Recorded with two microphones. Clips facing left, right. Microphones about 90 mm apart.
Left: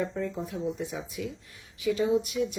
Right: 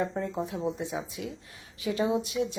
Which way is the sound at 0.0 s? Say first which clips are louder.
Right 1 dB; 35° right (ahead or behind).